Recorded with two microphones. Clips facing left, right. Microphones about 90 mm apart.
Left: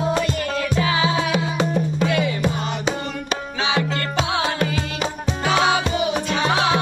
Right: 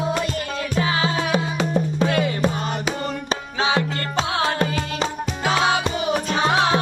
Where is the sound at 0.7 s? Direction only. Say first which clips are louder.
Even; 40° right (ahead or behind).